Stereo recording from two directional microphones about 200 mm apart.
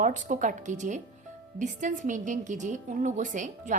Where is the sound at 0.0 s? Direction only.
40° right (ahead or behind).